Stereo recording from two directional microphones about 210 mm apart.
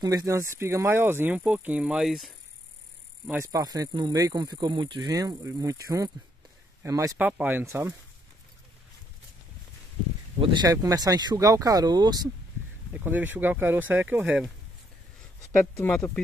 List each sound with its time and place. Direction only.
0.0 s speech: 15° right (ahead or behind); by 2.3 s centre (ahead or behind)
3.3 s speech: 15° right (ahead or behind)
10.4 s speech: 20° right (ahead or behind)
12.9 s speech: 10° right (ahead or behind)
15.6 s speech: 10° left (ahead or behind)